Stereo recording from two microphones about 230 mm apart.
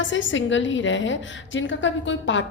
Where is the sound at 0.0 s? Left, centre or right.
Left.